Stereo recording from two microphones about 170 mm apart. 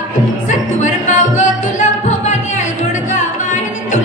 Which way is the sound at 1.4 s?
45° left (ahead or behind).